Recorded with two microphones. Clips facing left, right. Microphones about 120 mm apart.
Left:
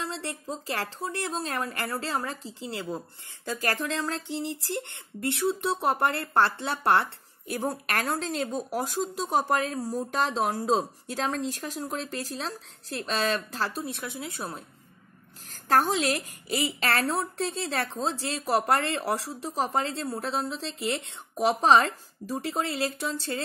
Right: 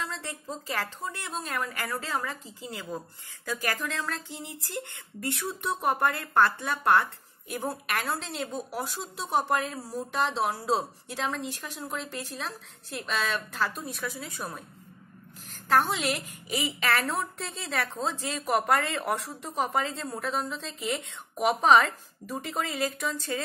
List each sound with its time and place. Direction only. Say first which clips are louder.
0.0 s a sound: left 2 dB; 30° left (ahead or behind)
0.7 s speech: left 2 dB; 30° left (ahead or behind)
9.8 s speech: left 5 dB; 15° left (ahead or behind)
10.1 s speech: even; 40° left (ahead or behind); by 14.6 s 25° left (ahead or behind)
15.5 s a woman's voice: left 1 dB; 40° left (ahead or behind)